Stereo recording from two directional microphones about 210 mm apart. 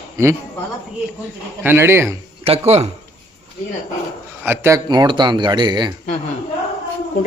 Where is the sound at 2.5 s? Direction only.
30° right (ahead or behind).